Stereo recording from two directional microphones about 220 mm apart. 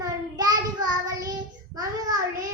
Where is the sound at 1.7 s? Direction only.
15° right (ahead or behind).